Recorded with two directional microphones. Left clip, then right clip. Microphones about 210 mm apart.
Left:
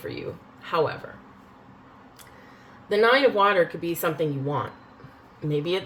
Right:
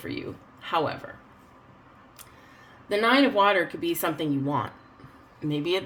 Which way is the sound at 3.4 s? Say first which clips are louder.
Left 1 dB; 45° right (ahead or behind).